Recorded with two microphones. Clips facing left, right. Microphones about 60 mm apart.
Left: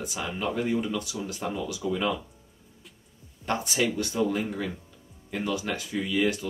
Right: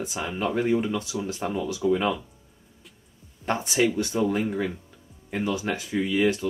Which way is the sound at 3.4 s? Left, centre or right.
Right.